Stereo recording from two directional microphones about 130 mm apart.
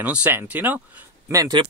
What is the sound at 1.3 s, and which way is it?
Speech, 25° right (ahead or behind).